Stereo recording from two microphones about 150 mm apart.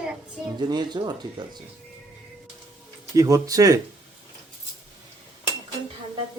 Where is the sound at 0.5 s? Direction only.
30° right (ahead or behind).